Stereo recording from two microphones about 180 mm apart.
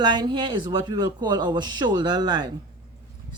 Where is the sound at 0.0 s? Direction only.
25° right (ahead or behind).